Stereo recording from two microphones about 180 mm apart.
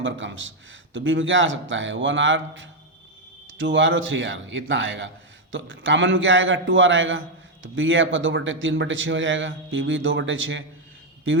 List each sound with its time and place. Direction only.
0.0 s a man's voice: 90° right